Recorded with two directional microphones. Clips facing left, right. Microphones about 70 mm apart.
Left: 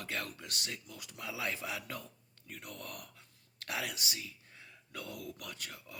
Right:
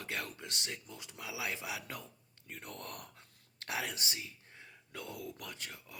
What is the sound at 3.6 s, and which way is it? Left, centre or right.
Speech, right.